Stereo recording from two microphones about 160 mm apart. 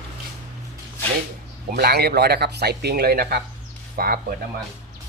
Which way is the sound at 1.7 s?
90° right.